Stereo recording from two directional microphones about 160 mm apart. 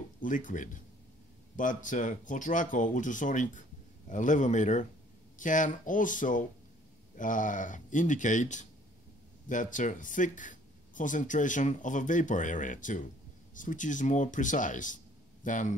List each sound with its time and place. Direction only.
0.2 s speech: 55° left (ahead or behind)